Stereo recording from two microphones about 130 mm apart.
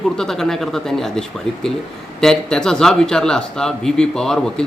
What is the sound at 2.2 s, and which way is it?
Speech, 5° left (ahead or behind).